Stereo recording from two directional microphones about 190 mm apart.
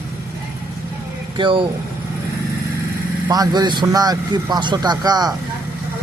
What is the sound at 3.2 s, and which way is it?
Speech, 20° right (ahead or behind).